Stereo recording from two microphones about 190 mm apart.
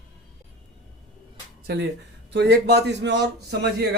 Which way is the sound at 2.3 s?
60° right (ahead or behind).